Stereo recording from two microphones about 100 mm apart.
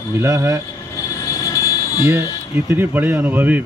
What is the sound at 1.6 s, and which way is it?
Vehicle, 35° left (ahead or behind).